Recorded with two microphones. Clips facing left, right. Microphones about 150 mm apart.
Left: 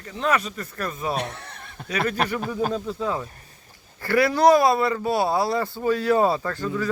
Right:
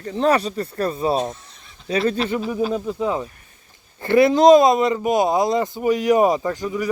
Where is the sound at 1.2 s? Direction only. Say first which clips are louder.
Right 5 dB; 70° left (ahead or behind).